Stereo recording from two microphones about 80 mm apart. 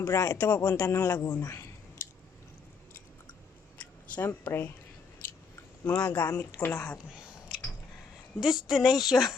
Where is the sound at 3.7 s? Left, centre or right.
Left.